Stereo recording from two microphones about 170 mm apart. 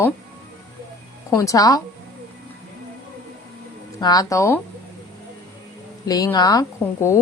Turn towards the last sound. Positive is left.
turn(degrees=20)  # may be behind; listen again after turning